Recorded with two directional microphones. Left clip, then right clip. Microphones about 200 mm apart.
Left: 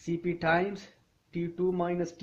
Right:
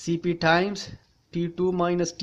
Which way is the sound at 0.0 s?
20° right (ahead or behind).